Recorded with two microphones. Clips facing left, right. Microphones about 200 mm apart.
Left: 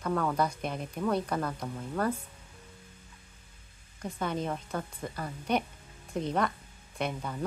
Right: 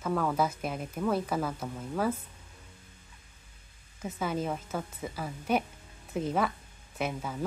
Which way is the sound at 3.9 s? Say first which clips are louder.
Right 1 dB; 5° right (ahead or behind).